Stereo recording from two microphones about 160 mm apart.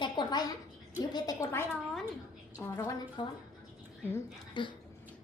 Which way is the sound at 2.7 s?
20° left (ahead or behind).